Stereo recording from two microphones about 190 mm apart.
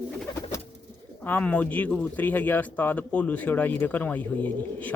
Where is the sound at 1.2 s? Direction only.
10° left (ahead or behind).